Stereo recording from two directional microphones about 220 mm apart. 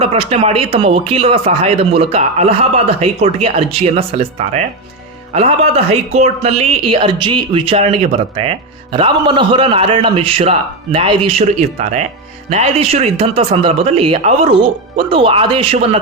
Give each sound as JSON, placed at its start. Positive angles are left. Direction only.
{"t": 0.0, "sound": "speech", "side_deg": -30}